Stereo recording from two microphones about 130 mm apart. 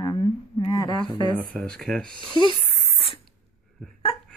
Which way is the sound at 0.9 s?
35° right (ahead or behind).